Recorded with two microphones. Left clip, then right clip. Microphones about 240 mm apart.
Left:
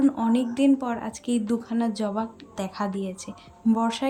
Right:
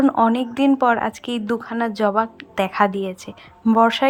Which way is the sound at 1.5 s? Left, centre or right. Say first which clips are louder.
Right 4 dB; right.